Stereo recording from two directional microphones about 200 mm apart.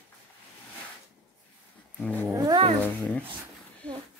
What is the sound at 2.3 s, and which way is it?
Cat, 20° right (ahead or behind).